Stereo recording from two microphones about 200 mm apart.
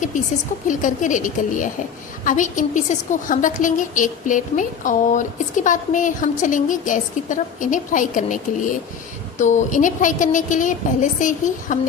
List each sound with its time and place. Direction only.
0.7 s a woman's voice: 40° left (ahead or behind)